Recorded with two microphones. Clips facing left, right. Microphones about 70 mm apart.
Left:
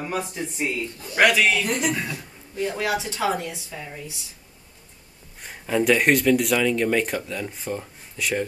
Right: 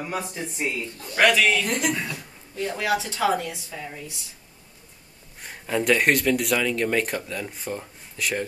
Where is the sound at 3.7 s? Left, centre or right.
Centre.